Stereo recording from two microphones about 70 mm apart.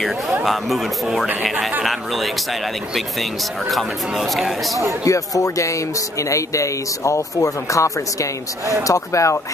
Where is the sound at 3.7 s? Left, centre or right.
Centre.